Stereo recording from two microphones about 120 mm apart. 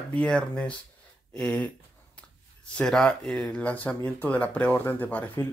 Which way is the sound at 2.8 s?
5° left (ahead or behind).